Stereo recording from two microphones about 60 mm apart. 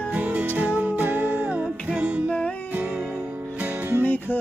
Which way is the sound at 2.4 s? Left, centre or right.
Left.